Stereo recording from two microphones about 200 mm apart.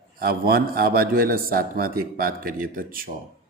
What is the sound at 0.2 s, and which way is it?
A man's voice, 50° right (ahead or behind).